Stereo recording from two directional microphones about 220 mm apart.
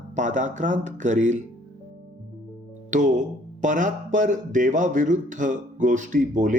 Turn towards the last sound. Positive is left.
turn(degrees=-35)  # may be behind; listen again after turning